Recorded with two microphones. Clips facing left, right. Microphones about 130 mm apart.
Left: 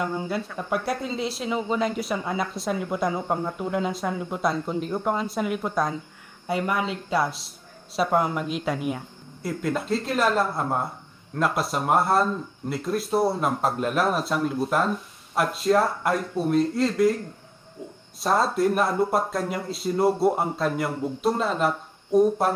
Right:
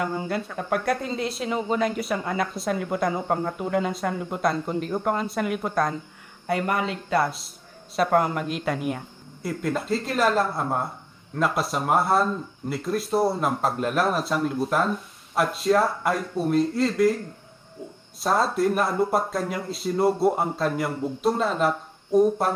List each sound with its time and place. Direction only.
0.0 s speech: centre (ahead or behind)
18.2 s speech: centre (ahead or behind)